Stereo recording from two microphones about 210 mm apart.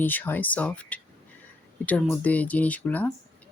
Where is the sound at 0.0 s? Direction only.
10° left (ahead or behind).